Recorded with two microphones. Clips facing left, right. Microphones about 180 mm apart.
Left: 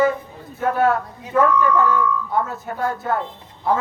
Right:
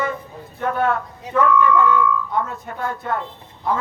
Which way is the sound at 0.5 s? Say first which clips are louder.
Left 2 dB; 40° left (ahead or behind).